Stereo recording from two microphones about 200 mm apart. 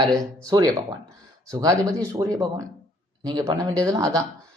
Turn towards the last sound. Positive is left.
turn(degrees=-15)  # may be behind; listen again after turning